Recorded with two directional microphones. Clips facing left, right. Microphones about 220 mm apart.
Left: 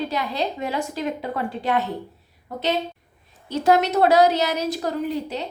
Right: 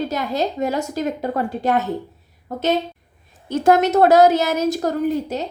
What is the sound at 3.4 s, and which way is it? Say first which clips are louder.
A woman's voice: right 3 dB; 50° right (ahead or behind).